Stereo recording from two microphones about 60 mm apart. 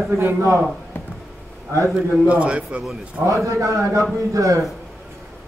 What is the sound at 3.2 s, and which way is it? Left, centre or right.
A man's voice, right.